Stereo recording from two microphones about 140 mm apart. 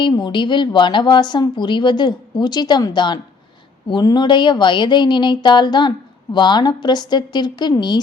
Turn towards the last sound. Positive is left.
turn(degrees=30)  # may be behind; listen again after turning